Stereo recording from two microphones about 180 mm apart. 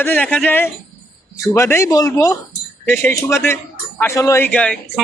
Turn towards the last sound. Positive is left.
turn(degrees=5)  # may be behind; listen again after turning